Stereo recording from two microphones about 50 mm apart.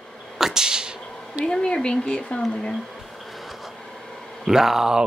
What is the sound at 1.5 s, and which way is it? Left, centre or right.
Speech, centre.